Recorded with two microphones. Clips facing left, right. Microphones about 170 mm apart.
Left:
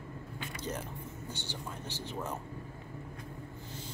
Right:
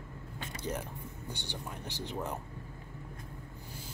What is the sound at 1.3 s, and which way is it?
Speech, 15° right (ahead or behind).